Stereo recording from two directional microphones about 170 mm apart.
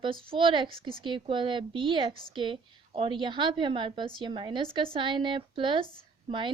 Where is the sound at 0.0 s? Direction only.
30° right (ahead or behind).